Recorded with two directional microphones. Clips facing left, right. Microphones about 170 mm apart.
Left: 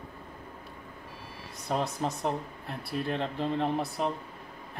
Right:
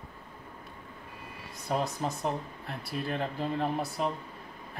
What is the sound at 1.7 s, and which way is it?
Speech, centre (ahead or behind).